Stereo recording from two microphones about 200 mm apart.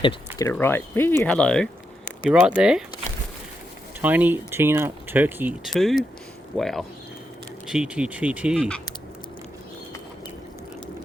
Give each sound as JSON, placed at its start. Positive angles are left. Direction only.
{"t": 0.0, "sound": "speech", "side_deg": 25}
{"t": 0.4, "sound": "speech", "side_deg": 10}
{"t": 4.0, "sound": "speech", "side_deg": -10}